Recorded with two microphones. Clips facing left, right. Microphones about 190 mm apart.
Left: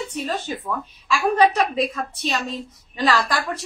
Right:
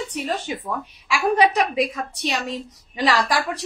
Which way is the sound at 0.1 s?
15° right (ahead or behind).